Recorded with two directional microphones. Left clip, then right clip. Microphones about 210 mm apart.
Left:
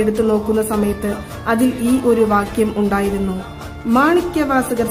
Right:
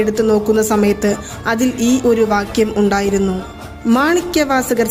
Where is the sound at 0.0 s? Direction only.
15° right (ahead or behind).